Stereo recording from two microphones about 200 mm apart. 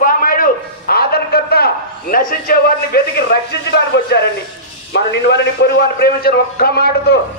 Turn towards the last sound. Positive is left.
turn(degrees=50)  # may be behind; listen again after turning